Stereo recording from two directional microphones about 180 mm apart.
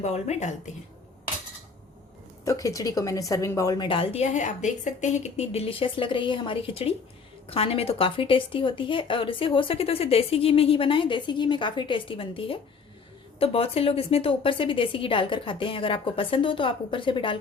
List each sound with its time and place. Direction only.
0.0 s a woman's voice: 40° left (ahead or behind)
2.4 s a woman's voice: 20° left (ahead or behind)